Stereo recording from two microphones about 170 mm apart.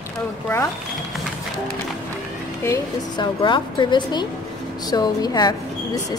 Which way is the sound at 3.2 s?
25° left (ahead or behind).